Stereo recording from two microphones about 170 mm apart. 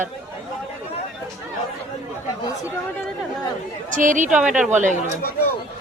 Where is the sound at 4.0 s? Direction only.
50° right (ahead or behind).